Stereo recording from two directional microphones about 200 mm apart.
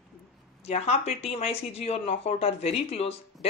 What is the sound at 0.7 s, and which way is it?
Speech, 30° left (ahead or behind).